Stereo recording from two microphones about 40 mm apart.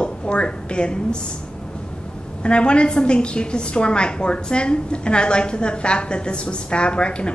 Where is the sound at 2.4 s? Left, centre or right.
Left.